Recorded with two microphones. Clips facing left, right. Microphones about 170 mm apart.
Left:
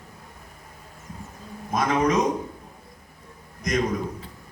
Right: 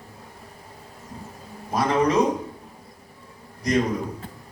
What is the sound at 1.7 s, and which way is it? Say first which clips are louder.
Speech: right 1 dB; 35° right (ahead or behind).